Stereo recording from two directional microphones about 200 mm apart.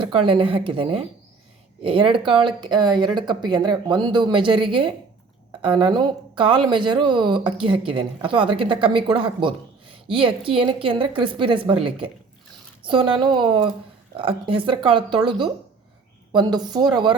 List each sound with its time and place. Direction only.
0.0 s speech: 25° right (ahead or behind)